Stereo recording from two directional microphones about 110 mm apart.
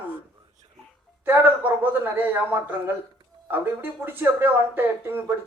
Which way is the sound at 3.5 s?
20° right (ahead or behind).